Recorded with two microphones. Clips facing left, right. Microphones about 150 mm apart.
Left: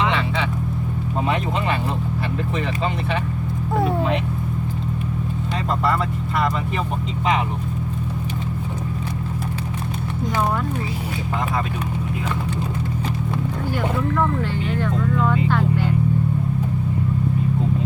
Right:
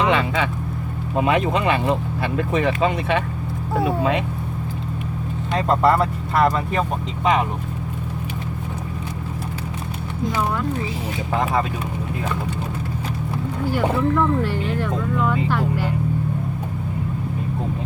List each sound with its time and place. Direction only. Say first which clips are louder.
0.0 s vehicle: right 3 dB; 45° right (ahead or behind)
2.5 s speech: right 7 dB; 60° right (ahead or behind)
5.6 s speech: right 5 dB; 40° right (ahead or behind)